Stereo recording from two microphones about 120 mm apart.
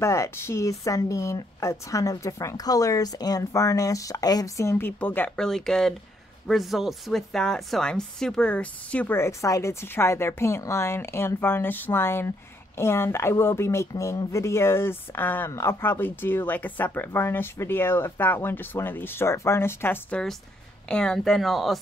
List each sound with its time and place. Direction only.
0.0 s speech: 25° left (ahead or behind)
5.3 s speech: 5° left (ahead or behind)
20.9 s speech: 5° left (ahead or behind)